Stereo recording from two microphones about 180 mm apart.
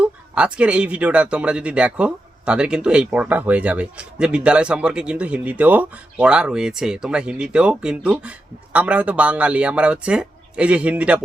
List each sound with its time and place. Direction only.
0.0 s speech: 5° right (ahead or behind)